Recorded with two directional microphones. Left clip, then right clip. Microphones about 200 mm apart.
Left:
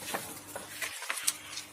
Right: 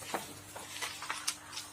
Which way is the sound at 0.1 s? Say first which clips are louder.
Even; 20° left (ahead or behind).